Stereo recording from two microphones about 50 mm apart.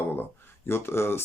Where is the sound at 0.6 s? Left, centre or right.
Left.